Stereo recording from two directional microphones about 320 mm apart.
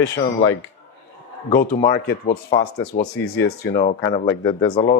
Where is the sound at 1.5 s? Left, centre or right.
Left.